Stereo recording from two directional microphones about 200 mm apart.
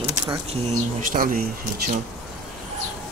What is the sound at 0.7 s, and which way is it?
Speech, 40° right (ahead or behind).